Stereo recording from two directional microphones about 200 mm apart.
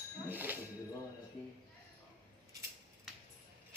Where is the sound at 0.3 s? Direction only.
10° right (ahead or behind).